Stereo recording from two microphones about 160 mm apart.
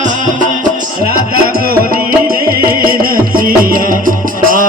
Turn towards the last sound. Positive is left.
turn(degrees=-60)  # may be behind; listen again after turning